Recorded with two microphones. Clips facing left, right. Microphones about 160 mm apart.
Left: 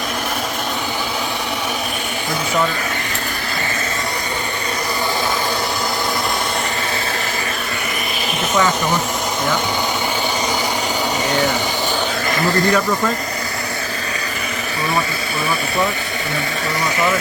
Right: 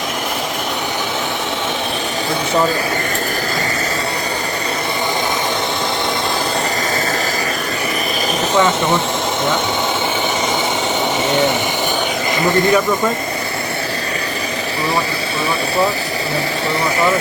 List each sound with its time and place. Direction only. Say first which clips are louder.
8.5 s speech: right 3 dB; 25° right (ahead or behind)
11.3 s a sound: right 3 dB; 20° right (ahead or behind)
12.5 s speech: right 3 dB; 20° right (ahead or behind)